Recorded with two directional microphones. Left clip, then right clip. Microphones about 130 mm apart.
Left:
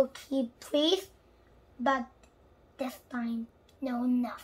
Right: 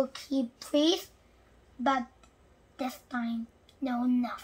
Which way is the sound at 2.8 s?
20° left (ahead or behind).